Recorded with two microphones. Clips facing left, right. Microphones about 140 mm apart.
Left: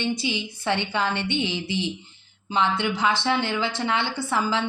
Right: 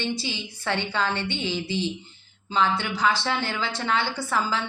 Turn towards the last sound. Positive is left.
turn(degrees=20)  # may be behind; listen again after turning